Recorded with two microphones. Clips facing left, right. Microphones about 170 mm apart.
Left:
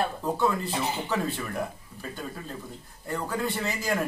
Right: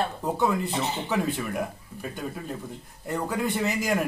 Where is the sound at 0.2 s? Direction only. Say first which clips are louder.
Right 1 dB; 20° right (ahead or behind).